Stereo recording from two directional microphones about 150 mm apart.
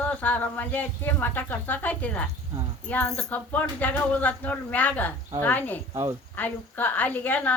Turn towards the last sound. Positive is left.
turn(degrees=10)  # may be behind; listen again after turning